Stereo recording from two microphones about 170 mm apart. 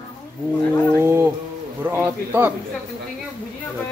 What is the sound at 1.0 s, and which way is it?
Music, 15° right (ahead or behind).